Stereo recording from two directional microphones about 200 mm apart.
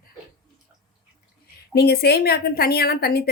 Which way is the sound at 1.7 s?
55° left (ahead or behind).